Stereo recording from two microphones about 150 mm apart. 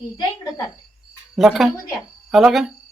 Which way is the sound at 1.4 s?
Centre (ahead or behind).